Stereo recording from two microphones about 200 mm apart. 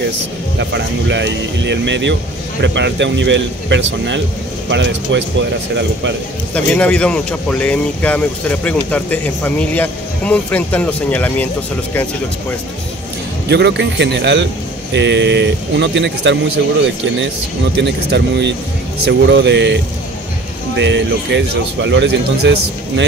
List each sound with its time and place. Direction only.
0.6 s a man's voice: 60° right (ahead or behind)
6.5 s speech: 5° left (ahead or behind)
13.5 s a man's voice: 60° right (ahead or behind)
17.7 s a man's voice: 60° right (ahead or behind)